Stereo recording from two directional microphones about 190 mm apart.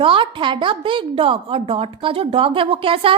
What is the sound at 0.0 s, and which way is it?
A woman's voice, 25° right (ahead or behind).